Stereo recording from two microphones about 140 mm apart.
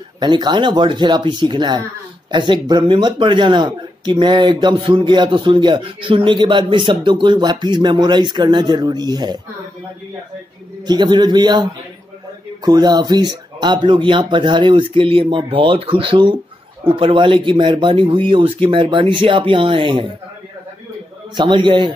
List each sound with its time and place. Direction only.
0.2 s speech: 30° right (ahead or behind)
10.9 s speech: 30° right (ahead or behind)
12.6 s speech: 30° right (ahead or behind)
21.4 s speech: 35° right (ahead or behind)